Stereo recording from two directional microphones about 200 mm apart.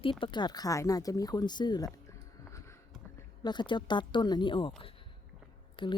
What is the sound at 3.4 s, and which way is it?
Speech, 20° left (ahead or behind).